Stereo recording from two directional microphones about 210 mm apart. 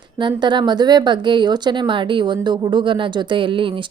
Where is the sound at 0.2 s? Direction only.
20° right (ahead or behind).